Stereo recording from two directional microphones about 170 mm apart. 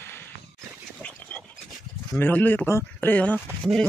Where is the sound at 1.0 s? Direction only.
10° left (ahead or behind).